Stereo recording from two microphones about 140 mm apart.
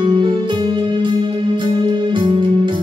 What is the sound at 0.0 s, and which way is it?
Music, 35° right (ahead or behind).